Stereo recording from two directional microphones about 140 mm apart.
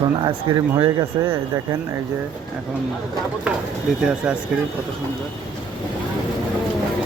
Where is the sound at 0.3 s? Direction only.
30° right (ahead or behind).